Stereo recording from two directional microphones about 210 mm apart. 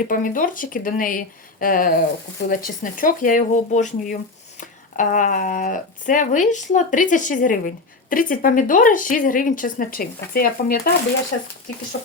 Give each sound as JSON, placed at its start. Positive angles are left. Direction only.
{"t": 0.0, "sound": "speech", "side_deg": 40}